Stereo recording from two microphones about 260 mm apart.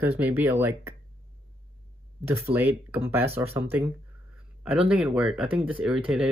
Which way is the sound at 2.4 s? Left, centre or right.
Centre.